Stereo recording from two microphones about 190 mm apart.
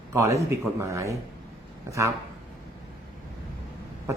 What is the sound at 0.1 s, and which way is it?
Speech, 15° right (ahead or behind).